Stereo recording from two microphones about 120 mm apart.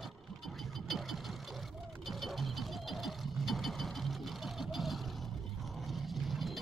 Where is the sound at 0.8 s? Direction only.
Centre (ahead or behind).